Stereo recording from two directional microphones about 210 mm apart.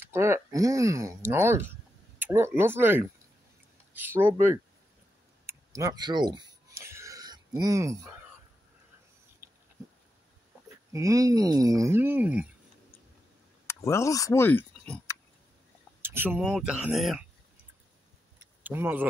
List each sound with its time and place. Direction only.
0.0 s speech: 10° right (ahead or behind)
5.5 s a sound: 15° right (ahead or behind)
10.9 s speech: 15° right (ahead or behind)
13.7 s speech: 15° left (ahead or behind)
16.0 s speech: 10° right (ahead or behind)
18.6 s speech: 10° right (ahead or behind)